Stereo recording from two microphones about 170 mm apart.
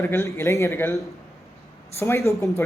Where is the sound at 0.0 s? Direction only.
15° left (ahead or behind).